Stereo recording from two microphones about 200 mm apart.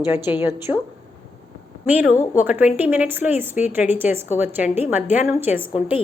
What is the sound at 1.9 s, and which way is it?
A woman's voice, 10° right (ahead or behind).